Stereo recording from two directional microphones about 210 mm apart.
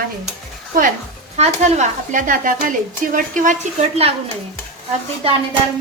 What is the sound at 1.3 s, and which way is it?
A woman's voice, 35° right (ahead or behind).